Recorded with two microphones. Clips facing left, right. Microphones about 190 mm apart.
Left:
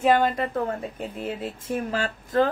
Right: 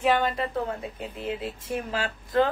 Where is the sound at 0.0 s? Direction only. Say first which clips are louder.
Left 3 dB; 45° left (ahead or behind).